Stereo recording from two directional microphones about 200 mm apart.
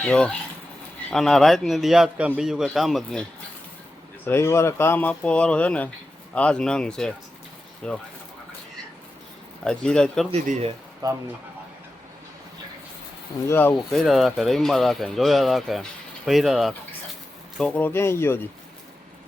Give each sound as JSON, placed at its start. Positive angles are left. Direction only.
{"t": 0.0, "sound": "speech", "side_deg": 5}
{"t": 4.3, "sound": "speech", "side_deg": 15}
{"t": 9.6, "sound": "speech", "side_deg": 5}
{"t": 10.3, "sound": "speech", "side_deg": -30}
{"t": 11.0, "sound": "speech", "side_deg": -15}
{"t": 13.5, "sound": "speech", "side_deg": 10}